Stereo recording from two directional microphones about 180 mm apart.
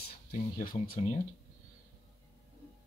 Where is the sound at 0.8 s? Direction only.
50° left (ahead or behind).